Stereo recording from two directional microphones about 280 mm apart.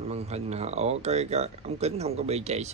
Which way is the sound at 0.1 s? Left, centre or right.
Right.